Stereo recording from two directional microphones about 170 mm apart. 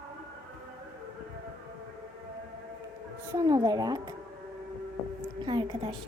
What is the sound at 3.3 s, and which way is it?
Speech, 20° right (ahead or behind).